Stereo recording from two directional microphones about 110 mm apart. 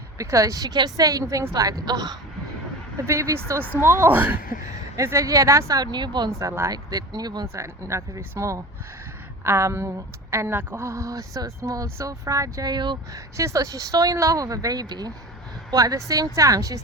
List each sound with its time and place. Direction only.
0.2 s a woman's voice: 30° right (ahead or behind)
4.9 s a woman's voice: 30° right (ahead or behind)
7.5 s speech: 25° right (ahead or behind); by 13.0 s 40° right (ahead or behind)
13.1 s a woman's voice: 30° right (ahead or behind)